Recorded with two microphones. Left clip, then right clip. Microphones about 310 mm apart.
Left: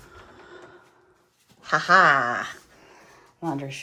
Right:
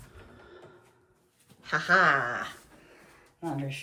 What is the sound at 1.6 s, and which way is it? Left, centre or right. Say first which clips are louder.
A woman's voice: left 6 dB; left.